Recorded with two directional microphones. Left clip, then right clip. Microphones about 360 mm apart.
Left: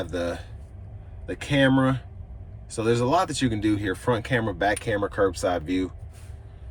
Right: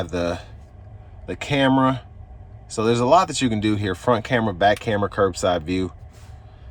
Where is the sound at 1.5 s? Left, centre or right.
Centre.